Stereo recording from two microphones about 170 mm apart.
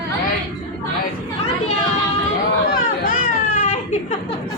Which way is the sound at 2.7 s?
55° left (ahead or behind).